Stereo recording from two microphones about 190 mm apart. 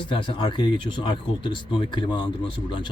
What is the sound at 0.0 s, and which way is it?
Speech, 25° left (ahead or behind).